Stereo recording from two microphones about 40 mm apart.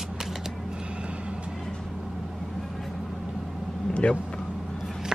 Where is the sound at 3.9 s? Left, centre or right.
Left.